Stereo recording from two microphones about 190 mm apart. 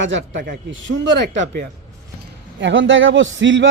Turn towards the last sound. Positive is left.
turn(degrees=-80)